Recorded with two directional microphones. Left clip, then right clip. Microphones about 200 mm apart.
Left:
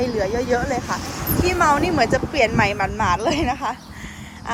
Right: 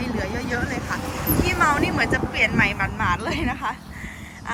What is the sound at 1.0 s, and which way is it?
Speech, 45° right (ahead or behind).